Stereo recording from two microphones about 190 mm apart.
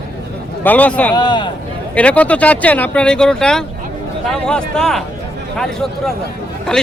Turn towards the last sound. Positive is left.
turn(degrees=5)  # may be behind; listen again after turning